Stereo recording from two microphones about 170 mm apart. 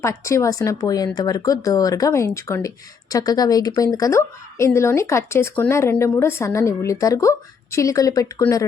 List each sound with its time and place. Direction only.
0.0 s speech: 15° left (ahead or behind)